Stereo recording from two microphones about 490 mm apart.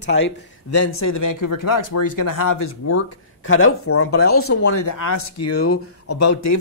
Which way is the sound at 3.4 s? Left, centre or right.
Left.